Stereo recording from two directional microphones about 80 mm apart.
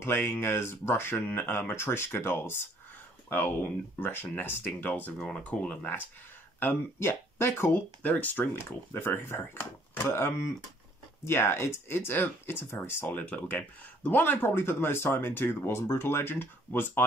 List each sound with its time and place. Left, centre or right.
0.0 s speech: left
6.6 s speech: left
8.0 s speech: centre